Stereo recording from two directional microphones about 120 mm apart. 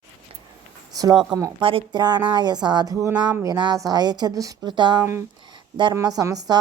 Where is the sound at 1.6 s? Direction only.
50° right (ahead or behind).